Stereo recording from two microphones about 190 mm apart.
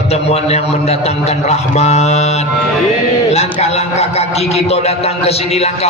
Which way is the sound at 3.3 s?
35° left (ahead or behind).